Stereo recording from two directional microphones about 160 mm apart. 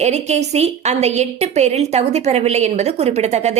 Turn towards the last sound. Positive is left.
turn(degrees=-45)  # may be behind; listen again after turning